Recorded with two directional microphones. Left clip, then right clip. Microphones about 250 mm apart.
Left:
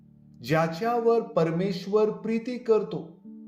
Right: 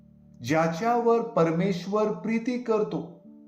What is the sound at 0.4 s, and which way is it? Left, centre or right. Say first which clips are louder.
Speech: right 1 dB; left.